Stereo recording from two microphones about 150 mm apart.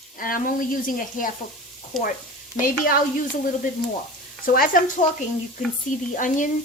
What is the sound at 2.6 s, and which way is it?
Speech, 65° left (ahead or behind).